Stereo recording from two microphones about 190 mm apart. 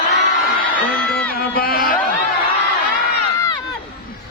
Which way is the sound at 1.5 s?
50° left (ahead or behind).